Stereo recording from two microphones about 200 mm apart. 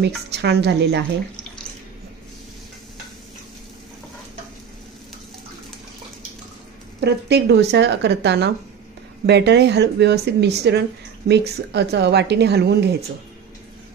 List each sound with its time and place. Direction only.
0.3 s speech: 55° right (ahead or behind)
7.0 s speech: 55° right (ahead or behind)